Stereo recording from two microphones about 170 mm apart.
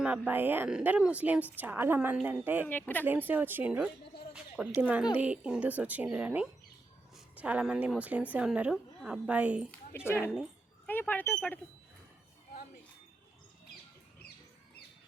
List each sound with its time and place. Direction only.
0.0 s speech: 10° right (ahead or behind)
2.6 s speech: 10° left (ahead or behind)
3.1 s speech: 10° right (ahead or behind)
10.1 s speech: 15° left (ahead or behind)